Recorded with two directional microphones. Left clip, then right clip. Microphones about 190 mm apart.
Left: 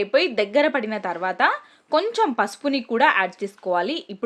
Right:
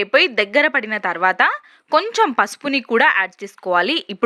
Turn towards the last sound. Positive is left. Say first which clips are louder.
# right 6 dB
turn(degrees=-20)  # may be behind; listen again after turning